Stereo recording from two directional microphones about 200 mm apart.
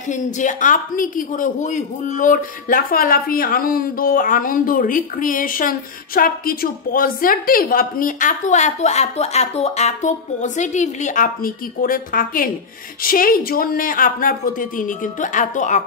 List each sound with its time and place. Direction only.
0.1 s a woman's voice: 40° left (ahead or behind)